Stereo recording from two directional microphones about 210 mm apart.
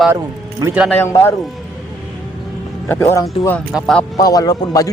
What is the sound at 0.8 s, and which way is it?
Speech, 10° left (ahead or behind).